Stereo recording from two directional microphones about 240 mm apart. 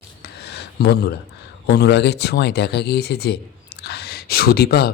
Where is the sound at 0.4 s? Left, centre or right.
Left.